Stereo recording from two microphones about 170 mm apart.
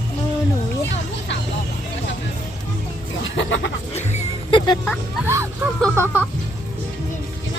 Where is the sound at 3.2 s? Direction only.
90° left.